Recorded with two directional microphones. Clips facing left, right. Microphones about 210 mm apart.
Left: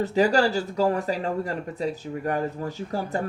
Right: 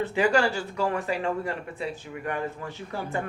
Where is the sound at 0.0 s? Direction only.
40° left (ahead or behind).